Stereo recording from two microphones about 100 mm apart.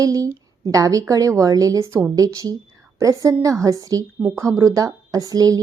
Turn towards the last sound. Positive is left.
turn(degrees=-35)  # may be behind; listen again after turning